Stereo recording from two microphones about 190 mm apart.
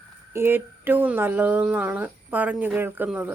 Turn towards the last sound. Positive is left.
turn(degrees=-10)  # may be behind; listen again after turning